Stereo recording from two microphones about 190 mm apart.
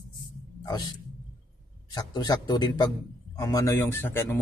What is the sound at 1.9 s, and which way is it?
A man's voice, 20° left (ahead or behind).